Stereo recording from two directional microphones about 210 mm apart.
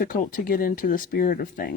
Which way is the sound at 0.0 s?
40° left (ahead or behind).